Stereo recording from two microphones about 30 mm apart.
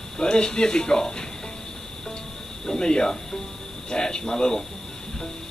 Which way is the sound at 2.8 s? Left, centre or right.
Left.